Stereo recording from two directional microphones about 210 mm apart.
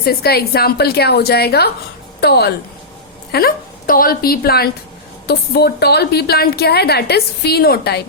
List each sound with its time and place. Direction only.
0.0 s a woman's voice: 45° left (ahead or behind)